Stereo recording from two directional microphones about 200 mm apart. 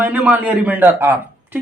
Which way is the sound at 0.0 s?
5° right (ahead or behind).